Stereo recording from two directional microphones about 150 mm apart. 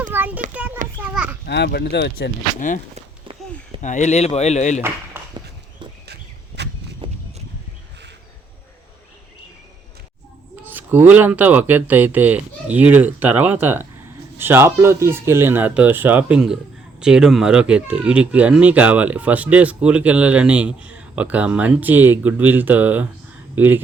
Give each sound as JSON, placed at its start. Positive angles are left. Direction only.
{"t": 0.1, "sound": "a sound", "side_deg": -10}
{"t": 1.0, "sound": "children playing", "side_deg": -10}
{"t": 1.5, "sound": "speech", "side_deg": 90}
{"t": 2.9, "sound": "a sound", "side_deg": -40}
{"t": 3.8, "sound": "speech", "side_deg": 50}
{"t": 7.0, "sound": "horse", "side_deg": -35}
{"t": 10.7, "sound": "speech", "side_deg": -10}